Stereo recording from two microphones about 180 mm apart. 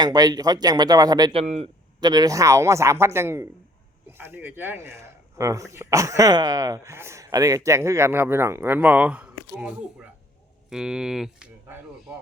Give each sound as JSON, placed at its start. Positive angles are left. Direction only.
{"t": 0.0, "sound": "speech", "side_deg": -20}
{"t": 1.3, "sound": "a man's voice", "side_deg": -35}
{"t": 2.0, "sound": "speech", "side_deg": -20}